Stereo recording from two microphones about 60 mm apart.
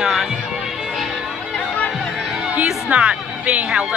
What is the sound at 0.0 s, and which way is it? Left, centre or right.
Music, centre.